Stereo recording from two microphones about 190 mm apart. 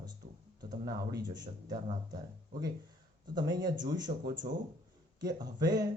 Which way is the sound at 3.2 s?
20° right (ahead or behind).